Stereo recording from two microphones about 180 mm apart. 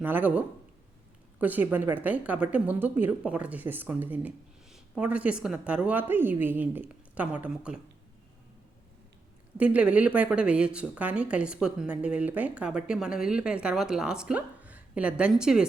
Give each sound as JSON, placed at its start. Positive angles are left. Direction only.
{"t": 0.0, "sound": "a woman's voice", "side_deg": -10}
{"t": 9.6, "sound": "speech", "side_deg": -5}